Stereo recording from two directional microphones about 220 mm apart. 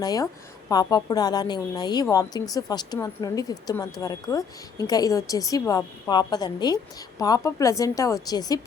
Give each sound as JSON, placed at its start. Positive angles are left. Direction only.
{"t": 0.0, "sound": "speech", "side_deg": 15}